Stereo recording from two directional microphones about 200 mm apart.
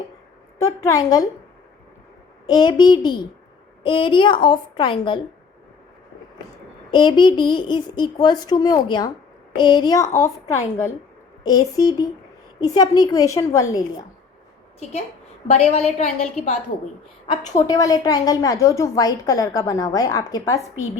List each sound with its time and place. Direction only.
0.6 s a woman's voice: 15° left (ahead or behind)
2.5 s a child's voice: 20° left (ahead or behind)
6.9 s a child's voice: 25° left (ahead or behind)
15.4 s a woman's voice: 30° left (ahead or behind)
17.7 s a woman's voice: 20° left (ahead or behind)